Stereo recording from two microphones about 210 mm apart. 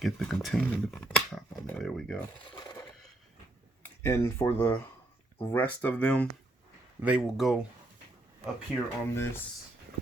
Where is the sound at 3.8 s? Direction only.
10° left (ahead or behind).